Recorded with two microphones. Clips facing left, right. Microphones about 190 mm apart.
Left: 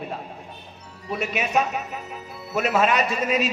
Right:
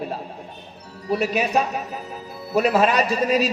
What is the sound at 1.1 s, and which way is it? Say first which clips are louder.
A man's voice: right 4 dB; 35° right (ahead or behind).